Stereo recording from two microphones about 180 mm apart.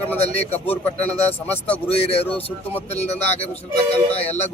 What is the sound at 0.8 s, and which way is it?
Speech, 10° left (ahead or behind).